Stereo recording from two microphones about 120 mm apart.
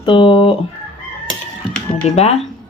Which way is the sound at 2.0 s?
60° left (ahead or behind).